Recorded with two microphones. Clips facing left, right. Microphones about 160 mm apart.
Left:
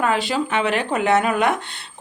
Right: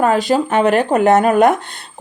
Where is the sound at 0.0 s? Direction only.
40° right (ahead or behind).